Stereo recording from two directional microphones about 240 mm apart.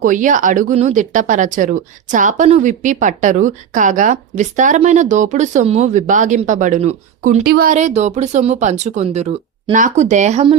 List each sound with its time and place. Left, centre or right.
0.0 s speech: right